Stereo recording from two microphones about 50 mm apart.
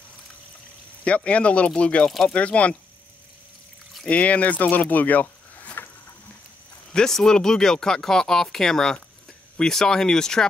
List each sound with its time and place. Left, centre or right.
1.0 s speech: left
4.1 s speech: left
6.9 s speech: centre